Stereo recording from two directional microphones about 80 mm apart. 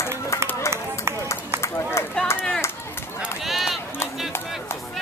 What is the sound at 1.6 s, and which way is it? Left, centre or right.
Run, left.